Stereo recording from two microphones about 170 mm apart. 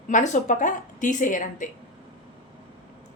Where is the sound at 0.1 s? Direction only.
50° left (ahead or behind).